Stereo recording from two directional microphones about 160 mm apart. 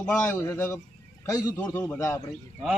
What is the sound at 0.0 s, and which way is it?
Speech, 15° left (ahead or behind).